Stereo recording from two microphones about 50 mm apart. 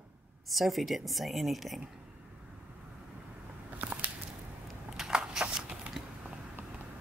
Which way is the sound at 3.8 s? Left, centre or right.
Right.